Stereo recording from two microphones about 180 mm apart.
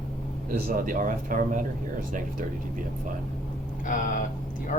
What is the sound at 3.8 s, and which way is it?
Speech, 45° left (ahead or behind).